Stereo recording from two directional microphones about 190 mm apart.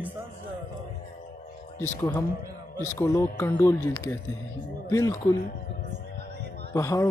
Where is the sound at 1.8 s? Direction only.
15° left (ahead or behind).